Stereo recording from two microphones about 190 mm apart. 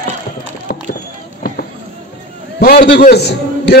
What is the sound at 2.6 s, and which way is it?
A man's voice, 55° left (ahead or behind).